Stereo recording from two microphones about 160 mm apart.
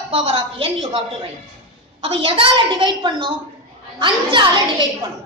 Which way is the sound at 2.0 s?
35° right (ahead or behind).